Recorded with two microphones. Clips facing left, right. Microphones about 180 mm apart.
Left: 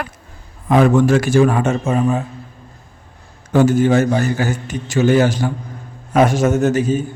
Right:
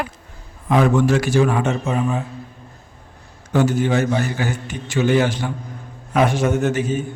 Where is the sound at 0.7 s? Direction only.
50° left (ahead or behind).